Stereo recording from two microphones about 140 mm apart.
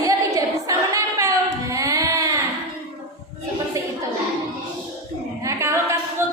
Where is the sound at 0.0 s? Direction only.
25° right (ahead or behind).